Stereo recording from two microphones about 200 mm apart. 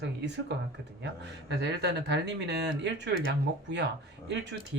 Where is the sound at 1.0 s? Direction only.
60° right (ahead or behind).